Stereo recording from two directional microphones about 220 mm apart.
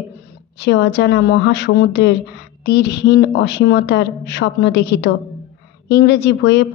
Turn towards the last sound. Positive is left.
turn(degrees=50)  # may be behind; listen again after turning